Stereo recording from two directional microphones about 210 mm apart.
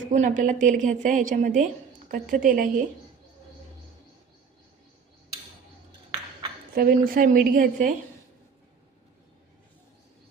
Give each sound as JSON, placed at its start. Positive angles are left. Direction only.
{"t": 0.1, "sound": "a woman's voice", "side_deg": -35}
{"t": 6.7, "sound": "speech", "side_deg": -45}